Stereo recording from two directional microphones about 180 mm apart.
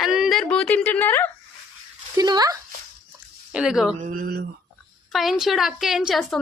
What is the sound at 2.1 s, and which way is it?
Speech, 20° right (ahead or behind).